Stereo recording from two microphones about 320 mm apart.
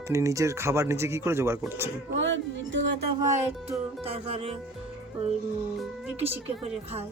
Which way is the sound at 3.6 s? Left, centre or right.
Centre.